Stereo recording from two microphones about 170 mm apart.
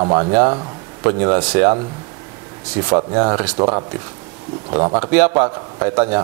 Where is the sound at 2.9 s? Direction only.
20° right (ahead or behind).